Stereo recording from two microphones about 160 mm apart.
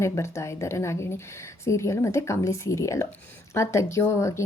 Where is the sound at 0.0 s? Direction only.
15° left (ahead or behind).